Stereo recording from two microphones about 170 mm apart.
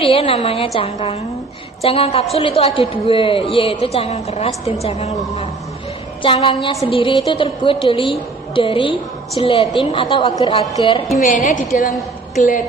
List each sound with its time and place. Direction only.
0.0 s a woman's voice: 35° left (ahead or behind)
6.2 s a woman's voice: 30° left (ahead or behind)
11.2 s a woman's voice: 50° left (ahead or behind)